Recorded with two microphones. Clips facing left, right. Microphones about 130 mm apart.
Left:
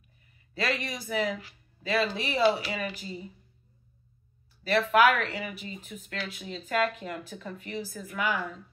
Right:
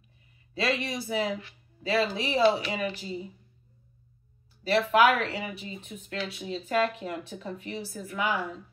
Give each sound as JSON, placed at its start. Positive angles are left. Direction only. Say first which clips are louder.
{"t": 0.6, "sound": "speech", "louder": "right 2 dB", "side_deg": -25}
{"t": 4.6, "sound": "speech", "louder": "right 1 dB", "side_deg": -30}